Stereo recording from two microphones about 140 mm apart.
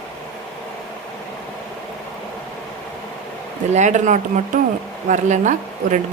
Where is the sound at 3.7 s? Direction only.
60° right (ahead or behind).